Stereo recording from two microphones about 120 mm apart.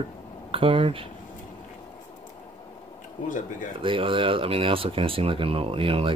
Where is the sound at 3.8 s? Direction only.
45° right (ahead or behind).